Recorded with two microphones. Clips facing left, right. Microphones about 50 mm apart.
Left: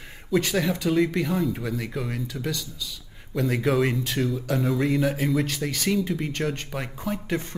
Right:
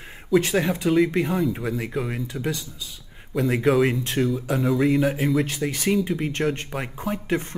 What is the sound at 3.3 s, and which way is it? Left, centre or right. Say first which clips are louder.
Speech: right 3 dB; centre.